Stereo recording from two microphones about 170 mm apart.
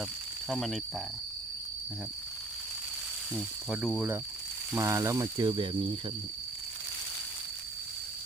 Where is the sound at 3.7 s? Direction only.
5° right (ahead or behind); by 5.7 s 25° right (ahead or behind).